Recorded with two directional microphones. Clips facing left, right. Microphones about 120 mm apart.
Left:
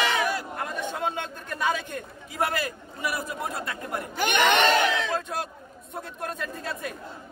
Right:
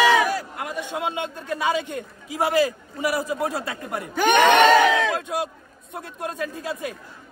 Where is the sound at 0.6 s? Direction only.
15° right (ahead or behind).